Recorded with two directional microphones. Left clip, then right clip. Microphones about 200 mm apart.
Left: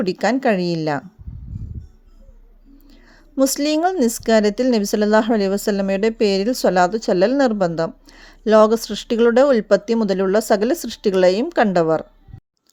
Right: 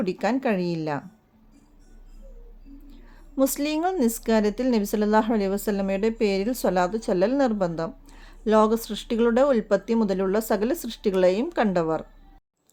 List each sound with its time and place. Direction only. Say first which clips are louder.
0.0 s a woman's voice: left 7 dB; 30° left (ahead or behind)
2.9 s a woman's voice: left 5 dB; 30° left (ahead or behind)